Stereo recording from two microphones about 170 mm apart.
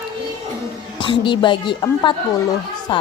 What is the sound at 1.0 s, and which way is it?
Speech, 30° left (ahead or behind).